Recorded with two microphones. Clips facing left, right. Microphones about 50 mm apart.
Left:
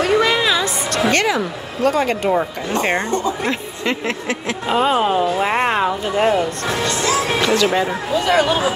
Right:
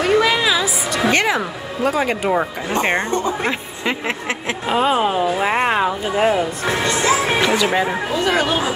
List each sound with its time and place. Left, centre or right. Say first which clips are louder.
0.0 s a sound: even; centre
1.8 s speech: left 2 dB; centre
2.7 s speech: even; right
4.6 s speech: left 1 dB; centre
6.7 s speech: right 3 dB; right